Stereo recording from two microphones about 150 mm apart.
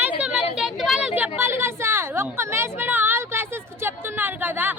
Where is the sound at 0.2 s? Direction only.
10° right (ahead or behind).